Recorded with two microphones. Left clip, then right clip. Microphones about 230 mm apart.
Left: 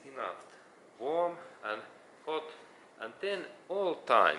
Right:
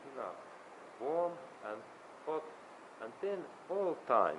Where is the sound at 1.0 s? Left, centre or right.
Right.